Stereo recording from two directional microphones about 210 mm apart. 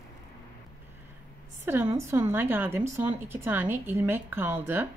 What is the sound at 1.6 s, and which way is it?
A woman's voice, 10° right (ahead or behind).